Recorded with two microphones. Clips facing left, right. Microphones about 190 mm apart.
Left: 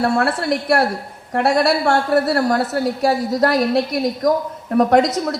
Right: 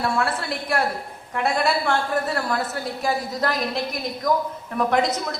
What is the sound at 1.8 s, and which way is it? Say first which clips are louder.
A woman's voice: left 7 dB; 40° left (ahead or behind).